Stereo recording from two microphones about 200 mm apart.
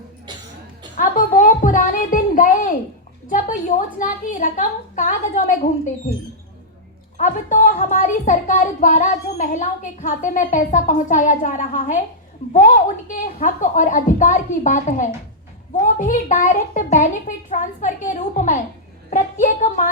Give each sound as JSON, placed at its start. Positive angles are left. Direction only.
{"t": 0.9, "sound": "a sound", "side_deg": 45}
{"t": 3.2, "sound": "speech", "side_deg": 40}
{"t": 7.2, "sound": "speech", "side_deg": 40}